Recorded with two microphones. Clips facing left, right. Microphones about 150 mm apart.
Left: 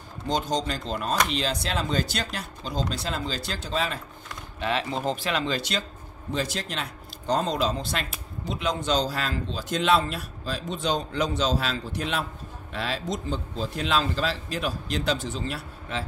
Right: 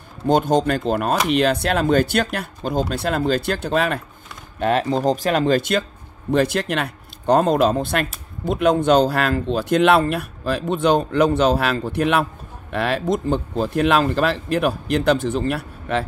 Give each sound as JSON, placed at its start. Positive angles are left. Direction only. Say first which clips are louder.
{"t": 0.3, "sound": "speech", "louder": "right 10 dB", "side_deg": -55}
{"t": 4.6, "sound": "speech", "louder": "right 9 dB", "side_deg": -45}